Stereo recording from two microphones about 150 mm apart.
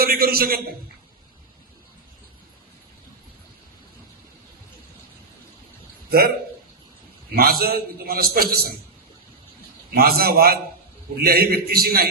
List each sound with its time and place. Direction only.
0.0 s a man's voice: 85° right
6.1 s a man's voice: 90° right
7.3 s a man's voice: 90° right
9.9 s a man's voice: 90° right